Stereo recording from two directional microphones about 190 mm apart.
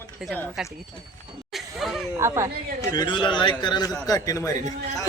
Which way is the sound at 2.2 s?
15° right (ahead or behind).